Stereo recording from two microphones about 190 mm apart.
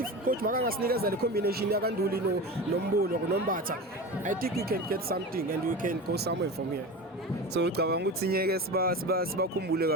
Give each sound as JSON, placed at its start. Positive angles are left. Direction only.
{"t": 0.3, "sound": "speech", "side_deg": -50}
{"t": 7.5, "sound": "speech", "side_deg": -60}